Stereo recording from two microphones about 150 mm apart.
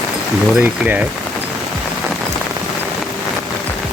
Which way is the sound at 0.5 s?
10° right (ahead or behind).